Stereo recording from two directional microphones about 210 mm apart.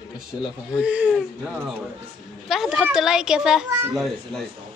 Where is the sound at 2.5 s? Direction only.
Centre (ahead or behind).